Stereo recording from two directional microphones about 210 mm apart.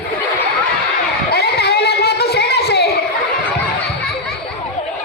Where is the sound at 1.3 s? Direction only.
50° left (ahead or behind).